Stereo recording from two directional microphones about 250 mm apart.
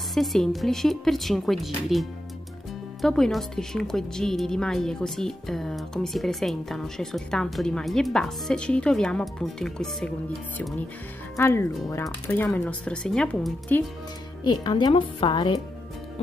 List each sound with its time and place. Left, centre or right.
0.1 s speech: centre
11.3 s speech: centre
14.4 s a woman's voice: centre